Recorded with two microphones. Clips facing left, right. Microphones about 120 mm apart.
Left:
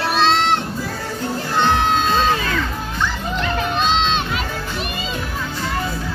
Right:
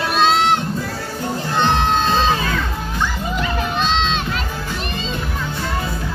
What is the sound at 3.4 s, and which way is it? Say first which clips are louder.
Run: left 1 dB; centre (ahead or behind).